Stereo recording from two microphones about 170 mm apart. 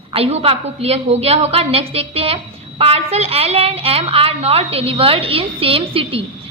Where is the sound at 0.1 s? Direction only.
35° right (ahead or behind).